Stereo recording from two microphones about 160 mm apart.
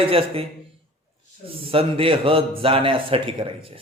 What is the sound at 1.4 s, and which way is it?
A man's voice, 35° right (ahead or behind).